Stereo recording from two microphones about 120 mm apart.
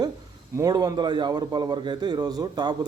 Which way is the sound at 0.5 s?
30° right (ahead or behind).